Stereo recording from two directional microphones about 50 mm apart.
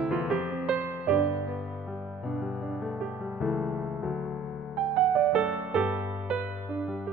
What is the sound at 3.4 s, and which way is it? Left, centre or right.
Music, centre.